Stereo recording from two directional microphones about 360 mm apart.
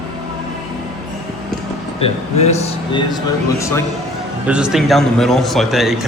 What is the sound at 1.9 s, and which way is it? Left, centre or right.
Speech, centre.